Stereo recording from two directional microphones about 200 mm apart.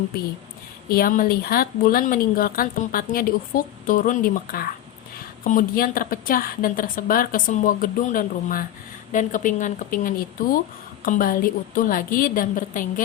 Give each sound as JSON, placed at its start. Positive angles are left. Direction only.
{"t": 0.9, "sound": "a woman's voice", "side_deg": 45}